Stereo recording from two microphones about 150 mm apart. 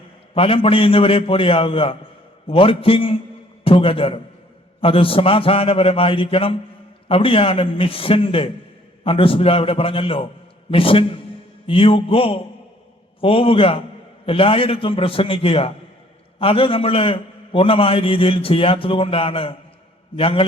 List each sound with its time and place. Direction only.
0.3 s a man's voice: 40° left (ahead or behind)